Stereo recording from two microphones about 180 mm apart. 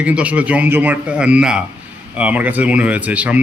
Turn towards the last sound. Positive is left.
turn(degrees=-5)  # may be behind; listen again after turning